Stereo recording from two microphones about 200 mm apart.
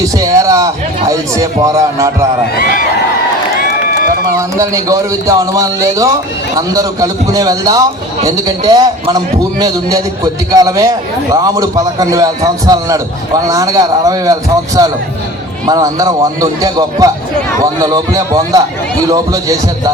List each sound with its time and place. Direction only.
0.0 s a sound: 15° right (ahead or behind)
1.4 s a man's voice: 15° right (ahead or behind)
4.4 s a man's voice: 15° right (ahead or behind)